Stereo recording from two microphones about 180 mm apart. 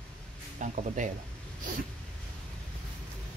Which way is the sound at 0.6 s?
45° right (ahead or behind).